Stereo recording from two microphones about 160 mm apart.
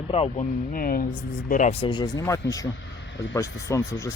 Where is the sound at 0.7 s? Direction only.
65° left (ahead or behind).